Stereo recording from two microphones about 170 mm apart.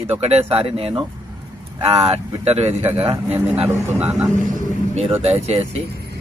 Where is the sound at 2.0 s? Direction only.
40° right (ahead or behind).